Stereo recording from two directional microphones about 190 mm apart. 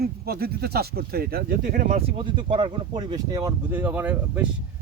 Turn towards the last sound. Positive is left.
turn(degrees=-10)  # may be behind; listen again after turning